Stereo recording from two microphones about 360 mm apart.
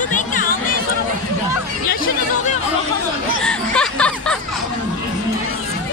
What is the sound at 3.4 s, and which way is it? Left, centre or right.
Music, centre.